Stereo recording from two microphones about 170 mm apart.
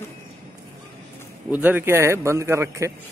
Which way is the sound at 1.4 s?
10° right (ahead or behind).